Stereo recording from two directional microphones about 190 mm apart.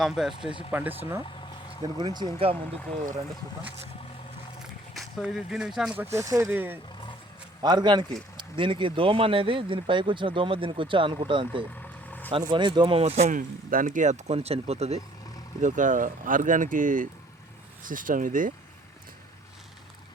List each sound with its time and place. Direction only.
0.0 s speech: centre (ahead or behind)
0.4 s speech: 30° left (ahead or behind)
0.7 s speech: 10° right (ahead or behind)
1.4 s a sound: 25° left (ahead or behind)
2.1 s speech: 25° right (ahead or behind)
4.6 s speech: centre (ahead or behind)
7.6 s speech: 20° right (ahead or behind); by 18.5 s 45° right (ahead or behind)